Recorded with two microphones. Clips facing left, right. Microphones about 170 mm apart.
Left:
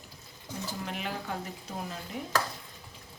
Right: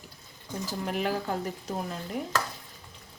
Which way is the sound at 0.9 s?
45° right (ahead or behind).